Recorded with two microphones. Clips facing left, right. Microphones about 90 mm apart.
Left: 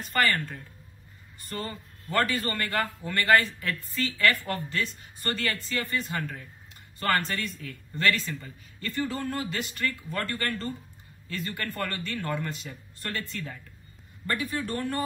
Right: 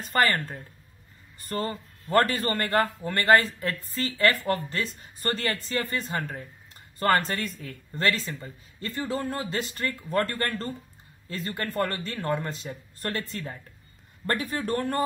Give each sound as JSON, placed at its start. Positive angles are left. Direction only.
{"t": 0.0, "sound": "a man's voice", "side_deg": -35}
{"t": 14.2, "sound": "speech", "side_deg": -45}